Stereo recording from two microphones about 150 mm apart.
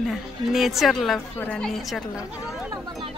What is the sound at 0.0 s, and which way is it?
A woman's voice, centre (ahead or behind).